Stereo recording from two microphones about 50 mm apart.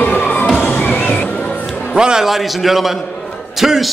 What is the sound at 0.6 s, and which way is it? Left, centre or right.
Music, left.